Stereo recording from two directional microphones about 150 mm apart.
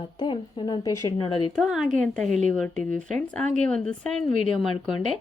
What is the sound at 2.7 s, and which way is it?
Speech, 60° right (ahead or behind).